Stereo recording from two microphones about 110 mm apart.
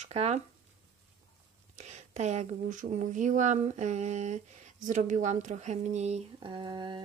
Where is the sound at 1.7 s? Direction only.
90° right.